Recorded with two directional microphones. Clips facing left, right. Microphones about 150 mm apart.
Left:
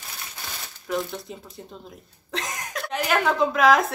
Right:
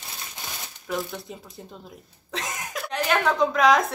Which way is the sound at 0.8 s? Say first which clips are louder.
Left 2 dB; centre (ahead or behind).